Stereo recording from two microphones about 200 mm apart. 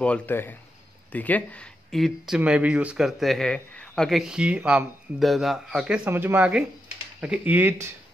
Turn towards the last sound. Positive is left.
turn(degrees=-10)  # may be behind; listen again after turning